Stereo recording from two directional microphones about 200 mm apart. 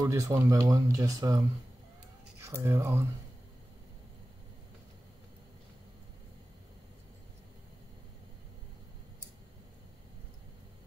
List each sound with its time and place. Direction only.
0.0 s speech: 15° right (ahead or behind)
2.4 s speech: 15° right (ahead or behind)